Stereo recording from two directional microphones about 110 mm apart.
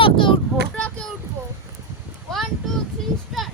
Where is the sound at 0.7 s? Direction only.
10° left (ahead or behind).